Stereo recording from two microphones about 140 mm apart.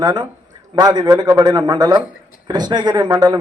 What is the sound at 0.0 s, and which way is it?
A man's voice, 30° right (ahead or behind).